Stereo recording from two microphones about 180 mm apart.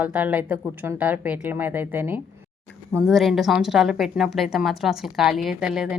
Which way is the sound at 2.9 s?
Centre (ahead or behind).